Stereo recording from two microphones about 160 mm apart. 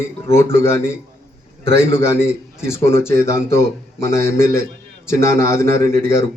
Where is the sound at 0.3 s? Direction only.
15° left (ahead or behind).